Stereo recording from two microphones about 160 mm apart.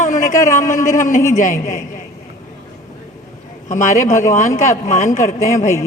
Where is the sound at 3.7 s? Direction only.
20° left (ahead or behind).